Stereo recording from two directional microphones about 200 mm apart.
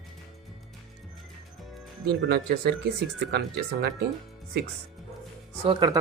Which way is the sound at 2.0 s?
55° right (ahead or behind).